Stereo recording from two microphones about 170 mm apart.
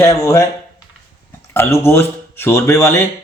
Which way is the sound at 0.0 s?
15° left (ahead or behind).